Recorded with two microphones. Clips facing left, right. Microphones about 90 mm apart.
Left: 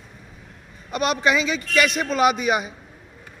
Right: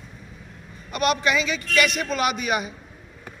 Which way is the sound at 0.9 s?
25° left (ahead or behind).